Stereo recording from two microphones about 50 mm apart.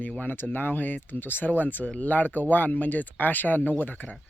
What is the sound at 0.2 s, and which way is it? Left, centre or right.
Speech, left.